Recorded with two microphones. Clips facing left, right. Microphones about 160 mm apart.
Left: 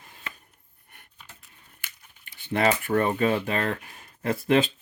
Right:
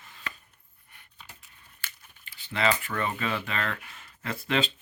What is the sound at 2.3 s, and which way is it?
Speech, 50° left (ahead or behind).